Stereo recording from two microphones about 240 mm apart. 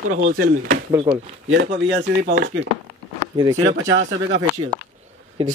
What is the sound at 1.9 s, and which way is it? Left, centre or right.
Speech, right.